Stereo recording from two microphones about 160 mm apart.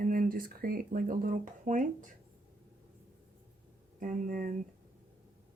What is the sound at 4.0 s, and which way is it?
Speech, 55° right (ahead or behind).